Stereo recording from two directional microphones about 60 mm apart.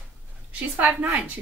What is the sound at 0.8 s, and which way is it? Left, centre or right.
Speech, centre.